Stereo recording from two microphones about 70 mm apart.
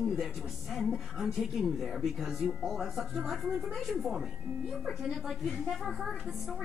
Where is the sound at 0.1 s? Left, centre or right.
Centre.